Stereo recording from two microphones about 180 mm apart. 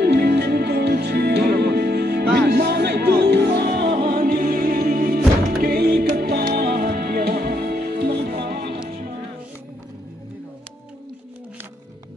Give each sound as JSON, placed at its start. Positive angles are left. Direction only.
{"t": 0.0, "sound": "music", "side_deg": -65}